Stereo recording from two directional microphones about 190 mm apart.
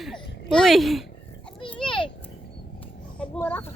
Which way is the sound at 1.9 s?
25° left (ahead or behind).